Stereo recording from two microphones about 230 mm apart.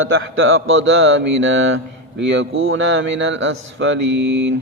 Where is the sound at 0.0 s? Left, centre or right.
Right.